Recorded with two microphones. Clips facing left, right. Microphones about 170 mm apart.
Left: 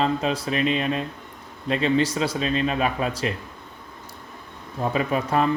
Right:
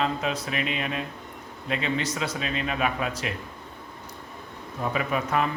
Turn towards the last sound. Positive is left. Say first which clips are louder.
# left 4 dB
turn(degrees=35)  # may be behind; listen again after turning